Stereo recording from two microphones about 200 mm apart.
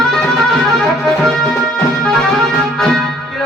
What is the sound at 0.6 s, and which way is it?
Music, centre (ahead or behind).